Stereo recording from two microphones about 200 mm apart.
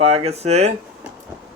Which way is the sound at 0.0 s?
30° right (ahead or behind).